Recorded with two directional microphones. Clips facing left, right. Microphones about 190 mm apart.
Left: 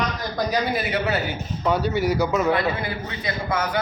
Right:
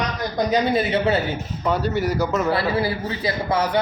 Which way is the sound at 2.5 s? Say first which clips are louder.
Right 2 dB; 30° right (ahead or behind).